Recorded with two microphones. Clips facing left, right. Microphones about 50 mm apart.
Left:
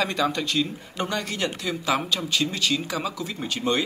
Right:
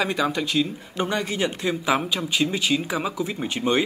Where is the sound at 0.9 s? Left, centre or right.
Right.